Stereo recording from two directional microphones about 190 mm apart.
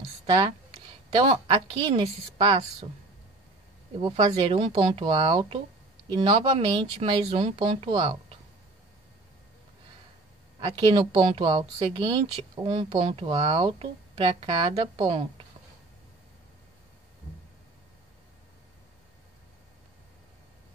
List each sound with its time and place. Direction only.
1.1 s speech: 30° right (ahead or behind)
4.0 s speech: 30° right (ahead or behind)
6.5 s speech: 35° right (ahead or behind)
10.6 s speech: 25° right (ahead or behind)